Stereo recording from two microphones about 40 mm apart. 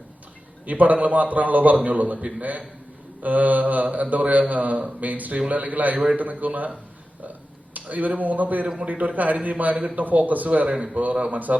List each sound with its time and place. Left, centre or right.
0.6 s a man's voice: right